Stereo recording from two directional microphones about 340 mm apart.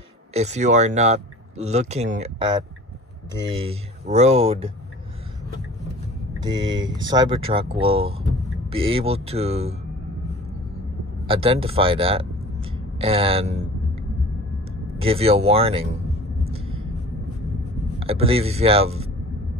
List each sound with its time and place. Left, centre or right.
0.3 s speech: centre
3.5 s speech: centre
6.4 s speech: centre
11.2 s speech: centre
15.0 s speech: centre
17.9 s speech: centre